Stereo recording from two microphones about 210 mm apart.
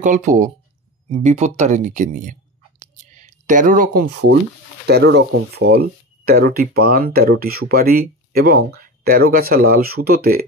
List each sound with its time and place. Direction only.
0.0 s speech: 35° right (ahead or behind)
2.8 s a sound: 35° right (ahead or behind); by 4.4 s 55° right (ahead or behind)
4.8 s speech: 50° right (ahead or behind)